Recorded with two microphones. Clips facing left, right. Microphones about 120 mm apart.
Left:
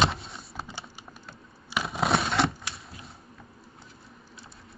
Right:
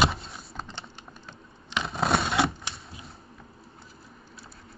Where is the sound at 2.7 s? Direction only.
25° right (ahead or behind).